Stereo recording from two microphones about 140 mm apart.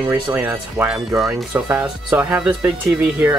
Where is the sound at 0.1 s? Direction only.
10° right (ahead or behind).